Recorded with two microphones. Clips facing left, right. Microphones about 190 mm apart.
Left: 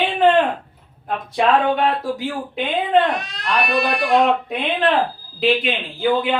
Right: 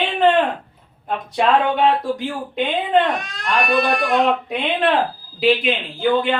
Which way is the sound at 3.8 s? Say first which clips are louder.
Left 2 dB; centre (ahead or behind).